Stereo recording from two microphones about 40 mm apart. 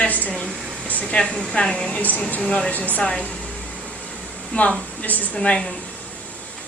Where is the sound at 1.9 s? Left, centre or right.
Left.